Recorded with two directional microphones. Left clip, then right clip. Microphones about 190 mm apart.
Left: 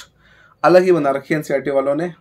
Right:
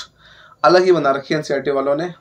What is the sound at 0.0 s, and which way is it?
Speech, 30° left (ahead or behind).